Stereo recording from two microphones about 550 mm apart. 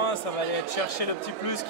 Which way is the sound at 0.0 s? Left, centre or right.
Left.